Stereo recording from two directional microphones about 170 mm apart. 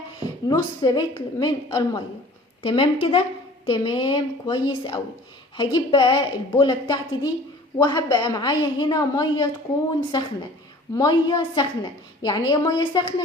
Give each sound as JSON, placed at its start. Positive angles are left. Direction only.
{"t": 0.2, "sound": "a woman's voice", "side_deg": 25}
{"t": 10.9, "sound": "a woman's voice", "side_deg": 25}